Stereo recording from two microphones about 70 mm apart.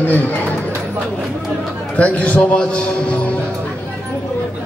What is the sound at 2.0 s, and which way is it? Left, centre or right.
A man's voice, centre.